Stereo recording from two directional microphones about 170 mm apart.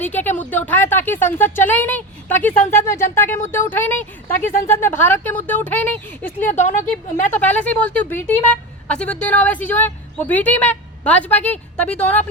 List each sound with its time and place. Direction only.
0.0 s speech: 10° left (ahead or behind)
6.5 s speech: 45° left (ahead or behind)
6.9 s speech: 10° left (ahead or behind)